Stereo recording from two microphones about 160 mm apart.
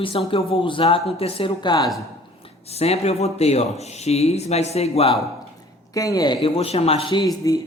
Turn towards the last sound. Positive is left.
turn(degrees=20)  # may be behind; listen again after turning